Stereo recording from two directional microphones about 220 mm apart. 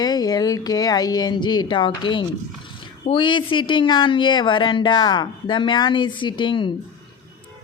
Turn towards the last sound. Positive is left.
turn(degrees=20)  # may be behind; listen again after turning